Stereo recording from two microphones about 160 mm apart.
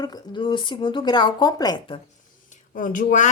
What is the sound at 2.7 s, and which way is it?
Speech, 55° left (ahead or behind).